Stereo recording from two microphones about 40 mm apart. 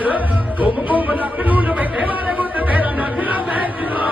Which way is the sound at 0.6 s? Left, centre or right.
Right.